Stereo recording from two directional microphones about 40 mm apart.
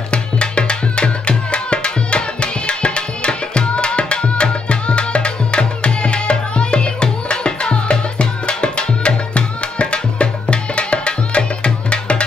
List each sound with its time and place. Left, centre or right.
0.1 s music: left